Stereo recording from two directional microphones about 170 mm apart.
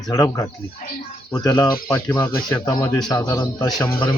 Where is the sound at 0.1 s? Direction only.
20° left (ahead or behind).